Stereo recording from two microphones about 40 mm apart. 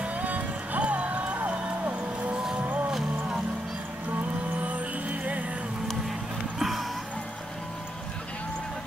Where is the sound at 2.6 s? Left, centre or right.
Right.